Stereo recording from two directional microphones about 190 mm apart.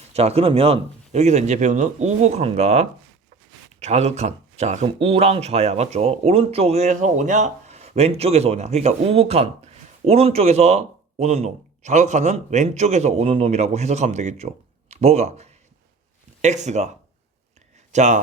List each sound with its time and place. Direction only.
0.1 s speech: 35° right (ahead or behind)
17.9 s speech: 40° right (ahead or behind)